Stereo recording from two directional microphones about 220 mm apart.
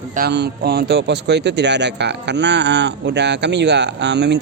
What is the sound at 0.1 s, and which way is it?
Speech, 45° right (ahead or behind).